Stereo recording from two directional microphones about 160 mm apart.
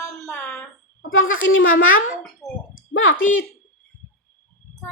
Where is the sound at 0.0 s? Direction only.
15° left (ahead or behind).